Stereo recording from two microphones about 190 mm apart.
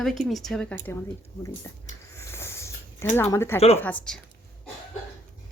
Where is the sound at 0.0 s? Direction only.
Centre (ahead or behind); by 1.7 s 15° left (ahead or behind).